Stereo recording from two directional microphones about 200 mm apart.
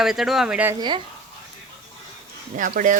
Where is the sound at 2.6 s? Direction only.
40° right (ahead or behind).